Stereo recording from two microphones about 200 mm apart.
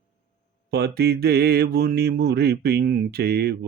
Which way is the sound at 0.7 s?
55° right (ahead or behind).